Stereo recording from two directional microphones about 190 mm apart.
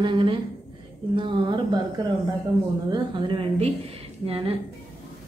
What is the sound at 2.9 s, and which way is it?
A woman's voice, 25° right (ahead or behind).